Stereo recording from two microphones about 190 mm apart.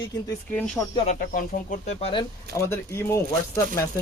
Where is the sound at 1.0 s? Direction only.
45° left (ahead or behind).